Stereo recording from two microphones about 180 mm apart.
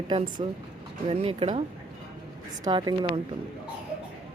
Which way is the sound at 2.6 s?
25° right (ahead or behind).